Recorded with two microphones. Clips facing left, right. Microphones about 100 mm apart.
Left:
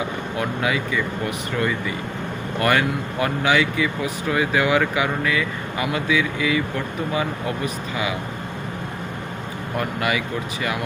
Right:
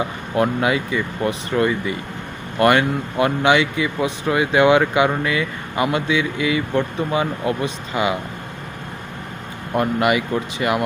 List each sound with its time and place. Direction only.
0.3 s speech: 25° right (ahead or behind)
9.7 s speech: 20° right (ahead or behind)